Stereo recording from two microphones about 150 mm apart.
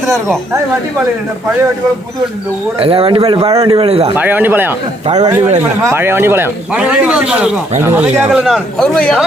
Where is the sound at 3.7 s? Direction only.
40° right (ahead or behind).